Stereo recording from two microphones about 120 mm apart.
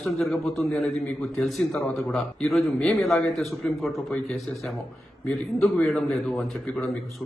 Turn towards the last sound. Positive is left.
turn(degrees=0)  # may be behind; listen again after turning